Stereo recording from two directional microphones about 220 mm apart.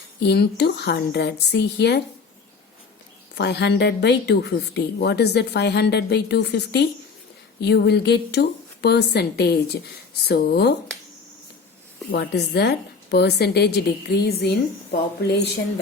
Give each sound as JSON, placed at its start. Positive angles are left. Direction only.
{"t": 0.2, "sound": "a woman's voice", "side_deg": 50}
{"t": 3.3, "sound": "a woman's voice", "side_deg": 50}
{"t": 12.1, "sound": "a woman's voice", "side_deg": 50}